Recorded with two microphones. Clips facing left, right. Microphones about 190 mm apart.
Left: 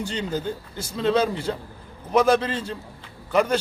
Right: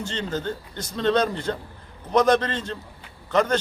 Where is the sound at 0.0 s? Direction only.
10° left (ahead or behind).